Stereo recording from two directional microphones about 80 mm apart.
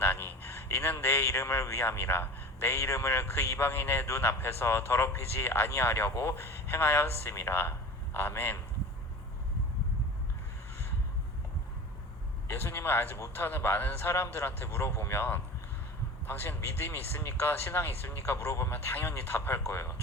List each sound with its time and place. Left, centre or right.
0.0 s speech: left
12.5 s speech: left